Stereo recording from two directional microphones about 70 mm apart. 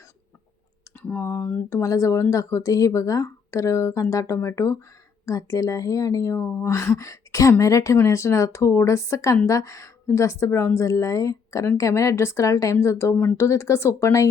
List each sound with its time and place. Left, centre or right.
1.0 s speech: left
1.7 s speech: left
6.3 s speech: left